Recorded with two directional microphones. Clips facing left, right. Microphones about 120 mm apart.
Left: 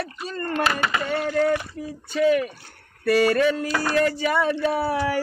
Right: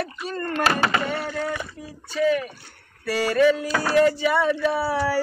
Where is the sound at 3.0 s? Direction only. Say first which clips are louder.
Left 1 dB; 55° left (ahead or behind).